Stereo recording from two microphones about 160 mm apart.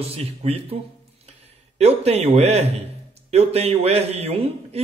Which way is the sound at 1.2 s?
40° right (ahead or behind).